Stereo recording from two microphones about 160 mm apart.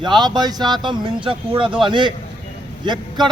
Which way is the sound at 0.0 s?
25° right (ahead or behind).